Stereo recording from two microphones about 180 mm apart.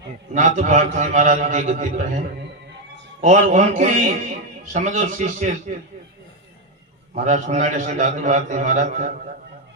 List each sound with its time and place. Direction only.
0.3 s a man's voice: 40° right (ahead or behind)
7.1 s a man's voice: 45° right (ahead or behind)